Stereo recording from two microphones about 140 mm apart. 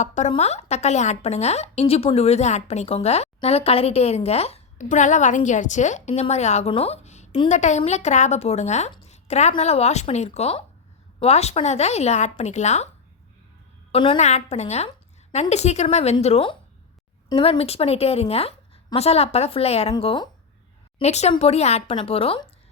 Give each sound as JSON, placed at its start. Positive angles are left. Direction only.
{"t": 0.0, "sound": "a woman's voice", "side_deg": 60}
{"t": 13.9, "sound": "a woman's voice", "side_deg": 40}
{"t": 14.2, "sound": "speech", "side_deg": 55}
{"t": 19.9, "sound": "speech", "side_deg": 35}
{"t": 21.0, "sound": "speech", "side_deg": 50}